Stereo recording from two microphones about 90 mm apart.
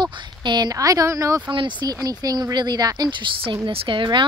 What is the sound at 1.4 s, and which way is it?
Speech, 60° right (ahead or behind).